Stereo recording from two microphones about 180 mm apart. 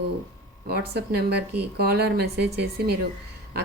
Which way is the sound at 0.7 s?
60° right (ahead or behind).